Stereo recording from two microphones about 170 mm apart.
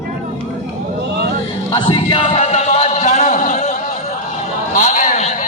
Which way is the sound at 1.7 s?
30° left (ahead or behind).